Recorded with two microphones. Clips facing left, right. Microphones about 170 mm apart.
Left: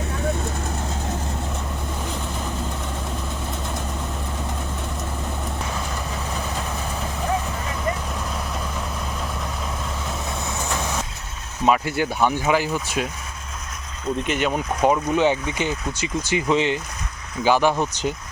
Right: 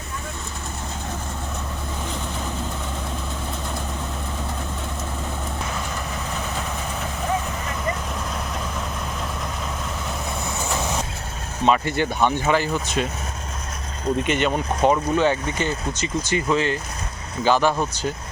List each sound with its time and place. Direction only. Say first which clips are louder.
11.6 s speech: even; 5° left (ahead or behind)
14.3 s speech: right 1 dB; 5° left (ahead or behind)